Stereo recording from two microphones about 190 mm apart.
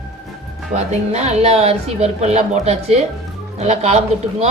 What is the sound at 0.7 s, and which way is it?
Speech, 35° right (ahead or behind).